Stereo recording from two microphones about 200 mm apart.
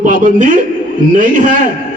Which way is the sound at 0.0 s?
40° right (ahead or behind).